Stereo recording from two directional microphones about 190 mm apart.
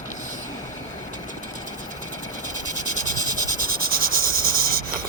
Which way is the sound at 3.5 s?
50° right (ahead or behind).